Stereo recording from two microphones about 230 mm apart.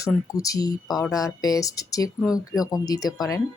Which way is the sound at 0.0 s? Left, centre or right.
Centre.